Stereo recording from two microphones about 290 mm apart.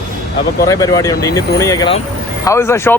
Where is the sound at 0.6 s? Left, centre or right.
Centre.